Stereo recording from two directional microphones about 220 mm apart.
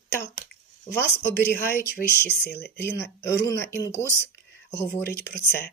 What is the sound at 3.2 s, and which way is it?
Speech, 50° left (ahead or behind).